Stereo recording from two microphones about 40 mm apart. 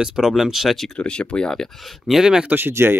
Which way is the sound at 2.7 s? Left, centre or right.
Right.